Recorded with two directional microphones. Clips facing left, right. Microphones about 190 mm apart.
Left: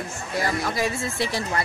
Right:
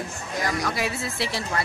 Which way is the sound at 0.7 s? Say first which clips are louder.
Left 2 dB; centre (ahead or behind).